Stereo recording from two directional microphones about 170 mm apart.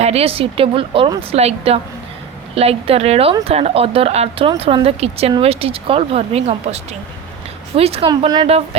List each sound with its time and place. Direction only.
0.0 s speech: 35° right (ahead or behind)
8.1 s speech: 25° right (ahead or behind)